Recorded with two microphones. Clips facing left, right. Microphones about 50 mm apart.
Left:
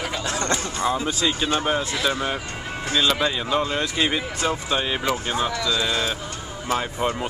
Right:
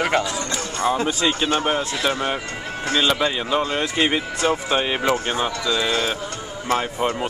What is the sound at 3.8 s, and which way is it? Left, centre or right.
Speech, right.